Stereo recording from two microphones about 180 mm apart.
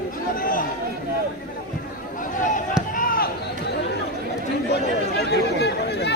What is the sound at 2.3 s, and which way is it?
Basketball bounce, 45° left (ahead or behind).